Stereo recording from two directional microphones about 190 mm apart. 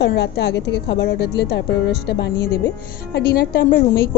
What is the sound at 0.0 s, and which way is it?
A woman's voice, 65° left (ahead or behind).